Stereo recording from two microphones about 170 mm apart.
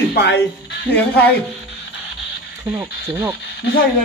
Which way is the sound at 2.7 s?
10° right (ahead or behind).